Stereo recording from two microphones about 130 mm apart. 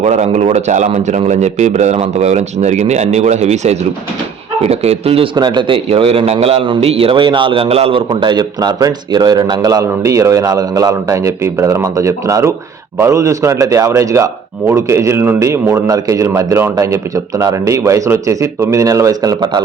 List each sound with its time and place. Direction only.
0.0 s a man's voice: 60° right (ahead or behind); by 19.6 s 30° right (ahead or behind)